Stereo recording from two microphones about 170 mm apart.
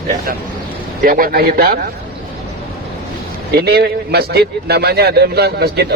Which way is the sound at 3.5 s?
70° right (ahead or behind).